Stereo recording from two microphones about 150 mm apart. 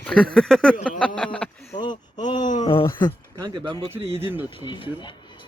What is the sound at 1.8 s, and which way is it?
Speech, 30° left (ahead or behind).